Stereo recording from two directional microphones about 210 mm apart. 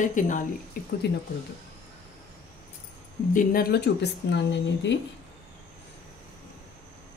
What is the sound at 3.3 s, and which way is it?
Speech, 45° left (ahead or behind).